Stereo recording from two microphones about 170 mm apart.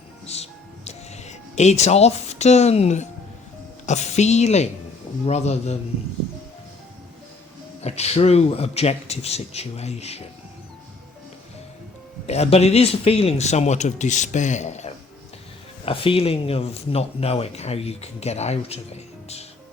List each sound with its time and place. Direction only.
0.3 s speech: 40° left (ahead or behind)
7.8 s speech: 40° left (ahead or behind)
12.2 s speech: 40° left (ahead or behind)
15.9 s speech: 35° left (ahead or behind)